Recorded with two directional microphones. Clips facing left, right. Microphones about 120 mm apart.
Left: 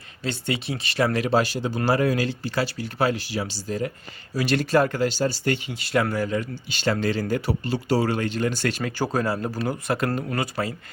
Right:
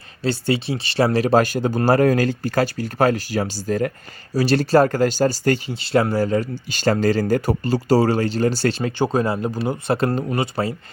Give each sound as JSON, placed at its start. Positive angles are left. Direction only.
{"t": 0.2, "sound": "speech", "side_deg": -35}
{"t": 4.4, "sound": "speech", "side_deg": -35}
{"t": 5.8, "sound": "speech", "side_deg": -30}